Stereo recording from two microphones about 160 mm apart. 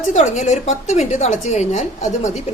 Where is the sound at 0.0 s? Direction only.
50° left (ahead or behind).